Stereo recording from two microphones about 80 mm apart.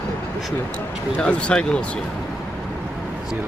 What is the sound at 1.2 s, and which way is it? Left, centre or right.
Speech, centre.